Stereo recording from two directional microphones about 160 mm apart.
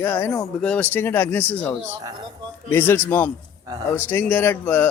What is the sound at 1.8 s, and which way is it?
Speech, 25° right (ahead or behind).